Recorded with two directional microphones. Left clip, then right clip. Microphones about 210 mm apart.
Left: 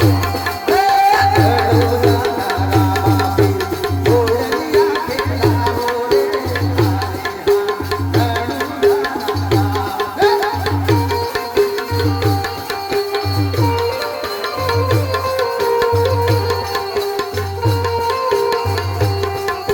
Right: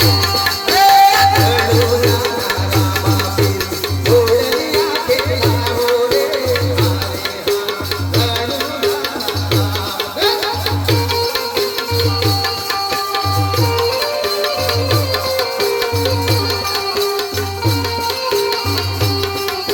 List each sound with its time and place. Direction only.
0.7 s music: 50° left (ahead or behind)
4.0 s music: 60° left (ahead or behind)
15.4 s music: 60° left (ahead or behind)